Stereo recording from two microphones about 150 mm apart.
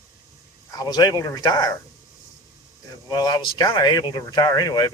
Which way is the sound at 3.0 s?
30° left (ahead or behind).